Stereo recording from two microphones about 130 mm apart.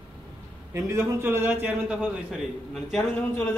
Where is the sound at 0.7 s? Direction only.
20° right (ahead or behind).